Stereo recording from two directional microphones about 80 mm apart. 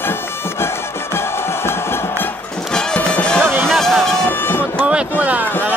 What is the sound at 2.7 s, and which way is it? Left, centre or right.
Music, centre.